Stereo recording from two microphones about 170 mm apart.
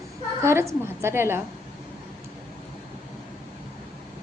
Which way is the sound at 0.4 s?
15° right (ahead or behind).